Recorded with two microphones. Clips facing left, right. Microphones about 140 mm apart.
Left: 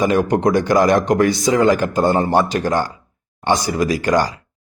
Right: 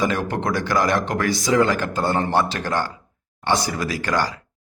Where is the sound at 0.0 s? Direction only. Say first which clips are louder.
Left 7 dB; 15° left (ahead or behind).